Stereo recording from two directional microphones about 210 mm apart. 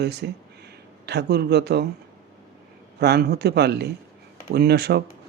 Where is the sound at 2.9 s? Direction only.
50° right (ahead or behind).